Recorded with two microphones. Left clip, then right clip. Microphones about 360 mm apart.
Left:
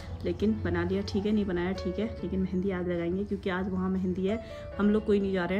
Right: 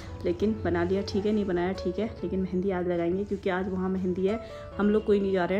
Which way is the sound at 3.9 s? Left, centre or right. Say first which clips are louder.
Right 4 dB; centre.